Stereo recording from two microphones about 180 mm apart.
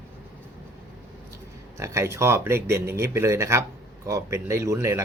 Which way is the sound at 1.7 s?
15° right (ahead or behind).